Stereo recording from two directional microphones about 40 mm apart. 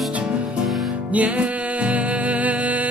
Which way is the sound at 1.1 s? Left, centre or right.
Right.